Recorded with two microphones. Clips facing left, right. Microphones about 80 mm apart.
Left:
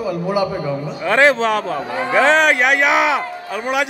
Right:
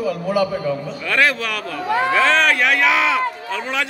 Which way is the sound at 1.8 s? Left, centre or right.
Right.